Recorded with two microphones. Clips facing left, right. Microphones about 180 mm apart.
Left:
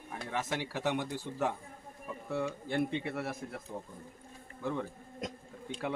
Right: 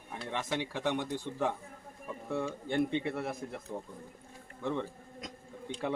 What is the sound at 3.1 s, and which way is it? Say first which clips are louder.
Speech: right 1 dB; 5° left (ahead or behind).